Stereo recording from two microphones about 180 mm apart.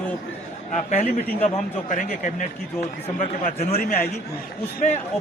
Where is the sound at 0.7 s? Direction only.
40° left (ahead or behind).